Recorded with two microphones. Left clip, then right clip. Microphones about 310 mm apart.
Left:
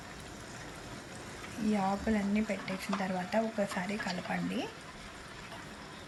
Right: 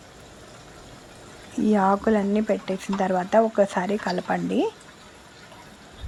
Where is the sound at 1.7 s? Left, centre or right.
Right.